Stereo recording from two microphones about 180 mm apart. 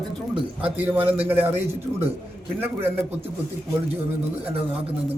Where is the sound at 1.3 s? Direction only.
35° right (ahead or behind).